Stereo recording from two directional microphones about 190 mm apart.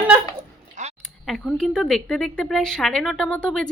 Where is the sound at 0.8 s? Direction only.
40° right (ahead or behind).